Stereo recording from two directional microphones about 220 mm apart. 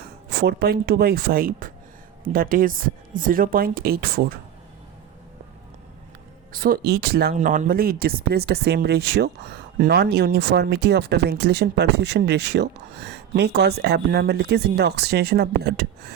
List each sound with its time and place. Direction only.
0.0 s speech: 45° right (ahead or behind)
6.5 s speech: 40° right (ahead or behind)